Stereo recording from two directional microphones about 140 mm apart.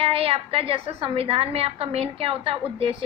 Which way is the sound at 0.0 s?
45° right (ahead or behind).